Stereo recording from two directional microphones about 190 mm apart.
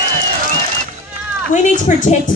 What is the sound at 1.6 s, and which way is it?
Speech, 40° left (ahead or behind).